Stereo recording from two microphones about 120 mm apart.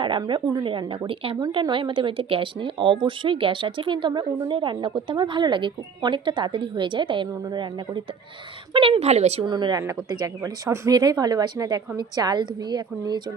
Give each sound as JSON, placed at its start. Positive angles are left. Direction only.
{"t": 0.0, "sound": "a woman's voice", "side_deg": -40}
{"t": 9.4, "sound": "speech", "side_deg": -40}